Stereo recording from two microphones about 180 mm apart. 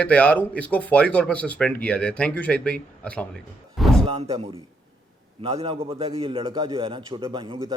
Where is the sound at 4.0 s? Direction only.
35° right (ahead or behind).